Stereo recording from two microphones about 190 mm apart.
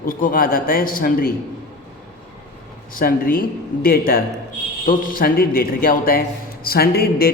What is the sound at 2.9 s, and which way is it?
A man's voice, 50° left (ahead or behind).